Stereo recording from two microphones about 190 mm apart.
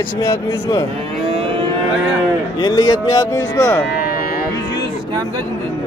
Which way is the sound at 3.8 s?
55° left (ahead or behind).